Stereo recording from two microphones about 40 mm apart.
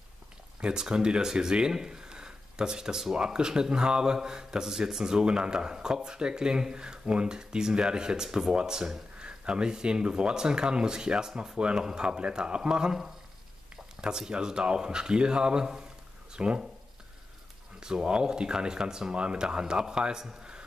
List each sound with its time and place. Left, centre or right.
0.6 s speech: right
14.1 s speech: centre
17.7 s speech: centre